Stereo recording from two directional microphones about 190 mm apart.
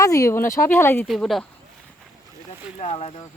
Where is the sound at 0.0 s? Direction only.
15° left (ahead or behind).